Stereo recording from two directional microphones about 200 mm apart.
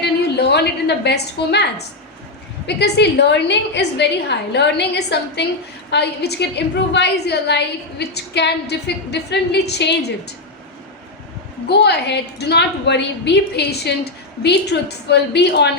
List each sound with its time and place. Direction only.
0.0 s a woman's voice: 55° left (ahead or behind)
2.6 s a woman's voice: 55° left (ahead or behind)
11.7 s a woman's voice: 55° left (ahead or behind)